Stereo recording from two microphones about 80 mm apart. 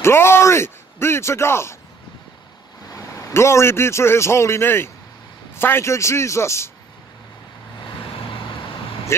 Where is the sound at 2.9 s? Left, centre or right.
Left.